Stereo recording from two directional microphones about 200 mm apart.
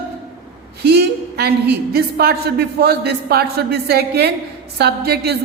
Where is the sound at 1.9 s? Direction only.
50° right (ahead or behind).